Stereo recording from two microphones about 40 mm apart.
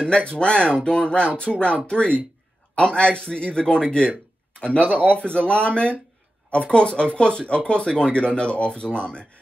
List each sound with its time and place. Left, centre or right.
0.0 s speech: left